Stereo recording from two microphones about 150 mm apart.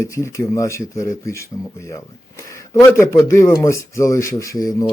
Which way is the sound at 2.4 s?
20° left (ahead or behind).